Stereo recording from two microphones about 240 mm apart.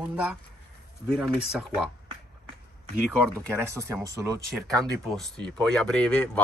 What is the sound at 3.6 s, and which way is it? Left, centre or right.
Speech, centre.